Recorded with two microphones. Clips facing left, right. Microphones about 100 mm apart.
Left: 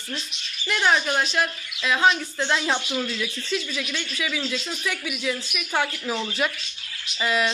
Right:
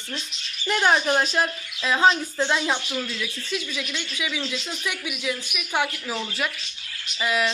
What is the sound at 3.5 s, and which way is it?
A woman's voice, 5° right (ahead or behind).